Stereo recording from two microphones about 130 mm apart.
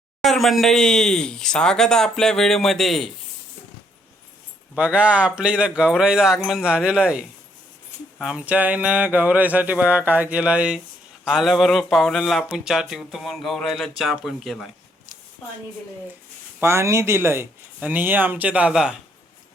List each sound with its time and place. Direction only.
0.2 s speech: centre (ahead or behind)
4.7 s speech: 10° right (ahead or behind)
16.6 s speech: 20° right (ahead or behind)